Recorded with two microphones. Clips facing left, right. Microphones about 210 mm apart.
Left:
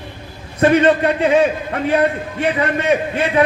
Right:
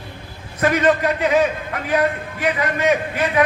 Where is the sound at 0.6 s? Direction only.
30° left (ahead or behind).